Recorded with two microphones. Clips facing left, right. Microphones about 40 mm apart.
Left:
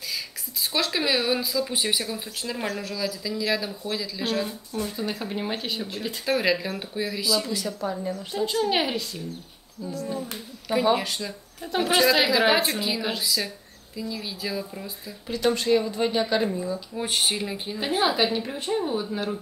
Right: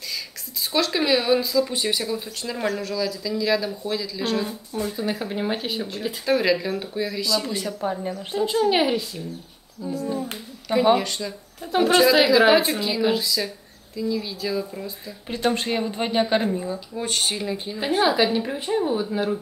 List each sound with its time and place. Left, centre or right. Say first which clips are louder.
0.7 s speech: right 4 dB; centre
7.4 s speech: right 2 dB; right
8.6 s a woman's voice: right 4 dB; centre
11.0 s speech: right 3 dB; centre
15.2 s speech: left 1 dB; right
16.9 s speech: even; centre